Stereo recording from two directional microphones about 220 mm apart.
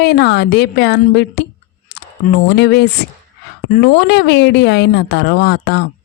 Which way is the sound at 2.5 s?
50° left (ahead or behind).